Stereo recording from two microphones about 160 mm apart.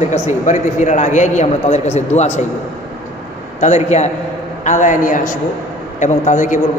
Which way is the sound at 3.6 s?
45° left (ahead or behind).